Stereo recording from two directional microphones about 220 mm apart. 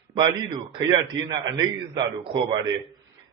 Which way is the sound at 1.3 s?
20° right (ahead or behind).